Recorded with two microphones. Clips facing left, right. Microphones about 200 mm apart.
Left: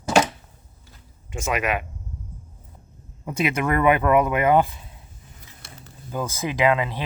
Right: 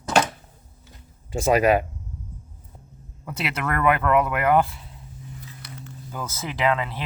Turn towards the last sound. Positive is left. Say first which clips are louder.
# left 3 dB
turn(degrees=15)  # may be behind; listen again after turning